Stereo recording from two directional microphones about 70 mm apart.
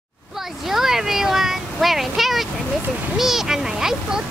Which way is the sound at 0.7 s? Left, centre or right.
Centre.